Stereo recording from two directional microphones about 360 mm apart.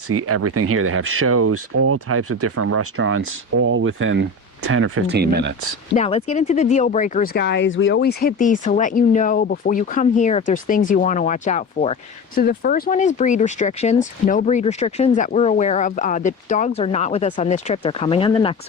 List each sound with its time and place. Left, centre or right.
0.1 s speech: right
6.0 s speech: centre